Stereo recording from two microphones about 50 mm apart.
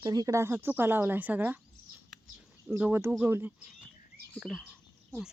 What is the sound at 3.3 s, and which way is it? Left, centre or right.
Speech, right.